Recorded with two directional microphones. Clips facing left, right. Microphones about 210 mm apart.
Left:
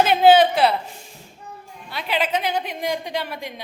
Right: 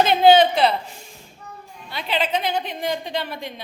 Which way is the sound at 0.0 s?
5° left (ahead or behind).